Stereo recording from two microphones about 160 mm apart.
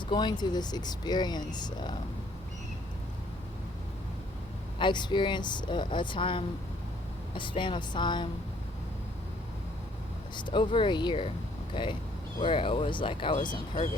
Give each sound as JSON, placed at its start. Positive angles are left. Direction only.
{"t": 0.1, "sound": "speech", "side_deg": 30}
{"t": 4.8, "sound": "speech", "side_deg": 30}
{"t": 10.3, "sound": "speech", "side_deg": 30}